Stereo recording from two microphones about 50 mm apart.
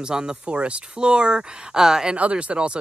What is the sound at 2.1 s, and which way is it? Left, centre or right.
Speech, right.